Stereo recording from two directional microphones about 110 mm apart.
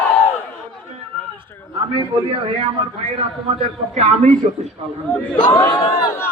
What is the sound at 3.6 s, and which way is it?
Speech, 85° right.